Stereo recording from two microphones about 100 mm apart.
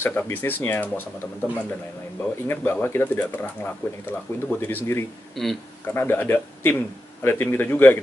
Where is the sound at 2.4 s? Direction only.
20° left (ahead or behind).